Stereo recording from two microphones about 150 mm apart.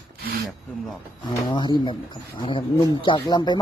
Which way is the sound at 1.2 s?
30° left (ahead or behind).